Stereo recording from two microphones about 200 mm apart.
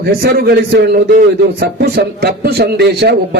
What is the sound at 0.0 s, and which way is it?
A man's voice, 50° right (ahead or behind).